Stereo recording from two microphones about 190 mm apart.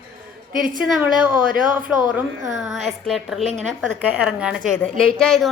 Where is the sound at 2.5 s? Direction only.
Centre (ahead or behind).